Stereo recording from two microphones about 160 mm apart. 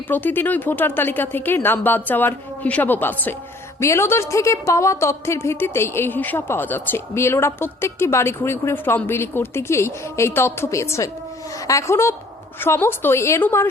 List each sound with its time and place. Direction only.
0.1 s a woman's voice: 10° left (ahead or behind)